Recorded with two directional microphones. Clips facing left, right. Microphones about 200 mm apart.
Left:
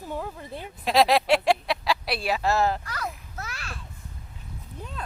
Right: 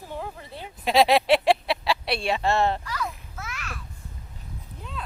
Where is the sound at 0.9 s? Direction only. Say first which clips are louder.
Right 1 dB; centre (ahead or behind).